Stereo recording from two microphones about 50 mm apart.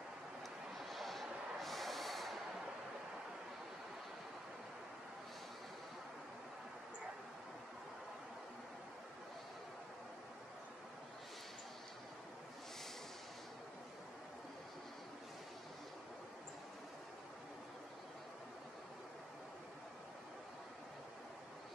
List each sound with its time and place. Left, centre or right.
0.7 s snort: centre